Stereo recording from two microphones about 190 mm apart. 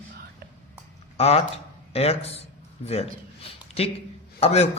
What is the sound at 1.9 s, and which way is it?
A man's voice, 30° left (ahead or behind).